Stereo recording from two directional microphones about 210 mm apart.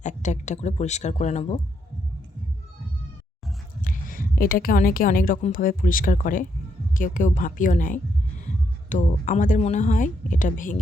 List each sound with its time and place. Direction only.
0.0 s speech: 35° left (ahead or behind)
3.8 s a woman's voice: 40° left (ahead or behind)